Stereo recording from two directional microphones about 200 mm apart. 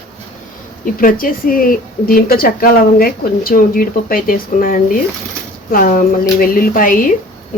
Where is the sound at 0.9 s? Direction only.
45° left (ahead or behind).